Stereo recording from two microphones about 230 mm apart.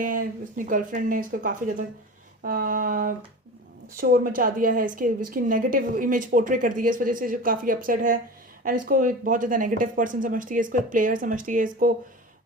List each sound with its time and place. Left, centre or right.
0.0 s a woman's voice: right